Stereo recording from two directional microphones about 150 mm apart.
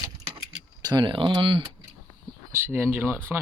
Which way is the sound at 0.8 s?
30° right (ahead or behind).